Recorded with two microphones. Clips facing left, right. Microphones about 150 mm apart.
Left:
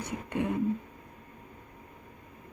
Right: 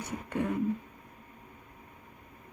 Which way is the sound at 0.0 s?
20° left (ahead or behind).